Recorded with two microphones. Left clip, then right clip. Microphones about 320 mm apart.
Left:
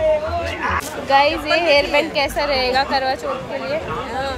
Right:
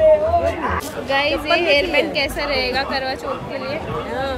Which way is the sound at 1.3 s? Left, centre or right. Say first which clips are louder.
Left 1 dB; left.